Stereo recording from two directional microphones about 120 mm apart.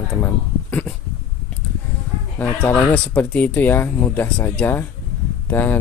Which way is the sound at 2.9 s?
15° left (ahead or behind).